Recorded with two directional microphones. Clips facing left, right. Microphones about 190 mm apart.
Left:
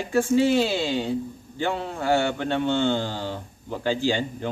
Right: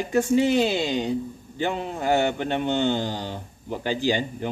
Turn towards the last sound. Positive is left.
turn(degrees=-15)  # may be behind; listen again after turning